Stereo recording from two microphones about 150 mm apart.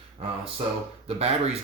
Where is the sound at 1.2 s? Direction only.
45° right (ahead or behind).